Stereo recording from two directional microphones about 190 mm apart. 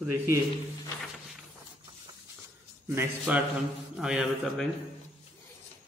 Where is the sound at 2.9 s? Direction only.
10° right (ahead or behind).